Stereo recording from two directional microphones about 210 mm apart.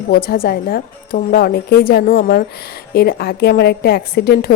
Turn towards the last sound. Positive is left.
turn(degrees=50)  # may be behind; listen again after turning